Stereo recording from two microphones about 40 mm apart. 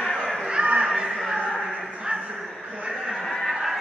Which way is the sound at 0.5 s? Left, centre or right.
Right.